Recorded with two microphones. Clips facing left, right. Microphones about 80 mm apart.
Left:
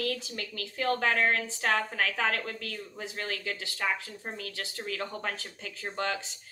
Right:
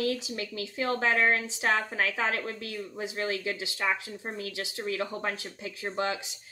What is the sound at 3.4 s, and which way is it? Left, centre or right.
Speech, right.